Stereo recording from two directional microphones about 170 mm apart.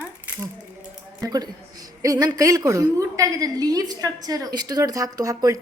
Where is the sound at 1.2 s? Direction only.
20° right (ahead or behind).